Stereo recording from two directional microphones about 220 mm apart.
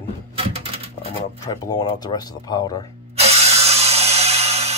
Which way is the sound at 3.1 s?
30° right (ahead or behind).